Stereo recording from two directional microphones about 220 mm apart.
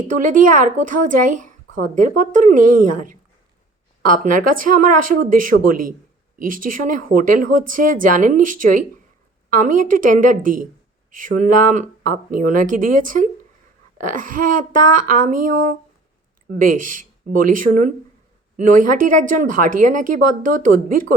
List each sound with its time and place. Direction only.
0.0 s speech: 35° right (ahead or behind)